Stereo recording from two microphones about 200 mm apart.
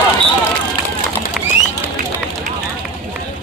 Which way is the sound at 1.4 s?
5° right (ahead or behind).